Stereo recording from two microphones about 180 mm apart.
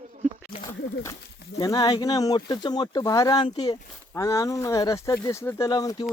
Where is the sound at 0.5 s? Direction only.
25° left (ahead or behind).